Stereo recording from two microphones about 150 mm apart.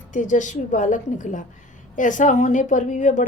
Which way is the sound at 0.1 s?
55° left (ahead or behind).